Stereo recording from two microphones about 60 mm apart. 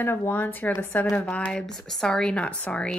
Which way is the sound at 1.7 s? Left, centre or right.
Centre.